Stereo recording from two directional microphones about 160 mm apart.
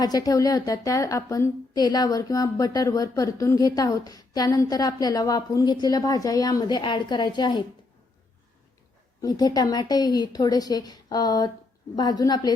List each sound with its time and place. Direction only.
0.0 s a woman's voice: 25° left (ahead or behind)
9.2 s a woman's voice: 25° left (ahead or behind)